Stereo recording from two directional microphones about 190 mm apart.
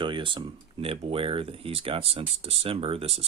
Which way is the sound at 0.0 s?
25° right (ahead or behind).